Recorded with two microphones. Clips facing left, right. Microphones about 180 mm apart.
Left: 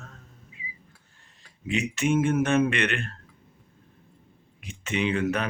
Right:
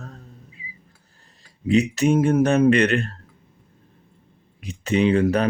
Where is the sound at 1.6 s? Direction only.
35° right (ahead or behind).